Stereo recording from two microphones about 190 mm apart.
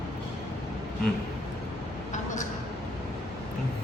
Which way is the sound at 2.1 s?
40° left (ahead or behind).